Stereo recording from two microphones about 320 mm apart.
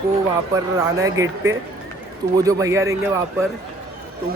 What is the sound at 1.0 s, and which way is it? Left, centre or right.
Speech, centre.